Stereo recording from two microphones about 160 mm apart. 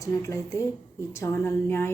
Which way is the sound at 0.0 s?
20° left (ahead or behind).